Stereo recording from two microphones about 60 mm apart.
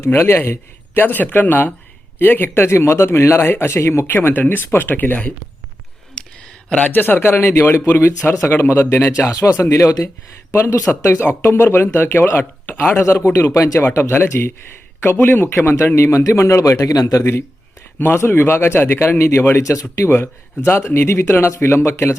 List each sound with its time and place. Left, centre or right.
0.0 s a man's voice: left
6.7 s a man's voice: left
8.4 s a man's voice: left
9.3 s a man's voice: left
16.0 s a man's voice: left
18.2 s a man's voice: left
19.2 s a man's voice: left
19.5 s speech: left
20.1 s a man's voice: left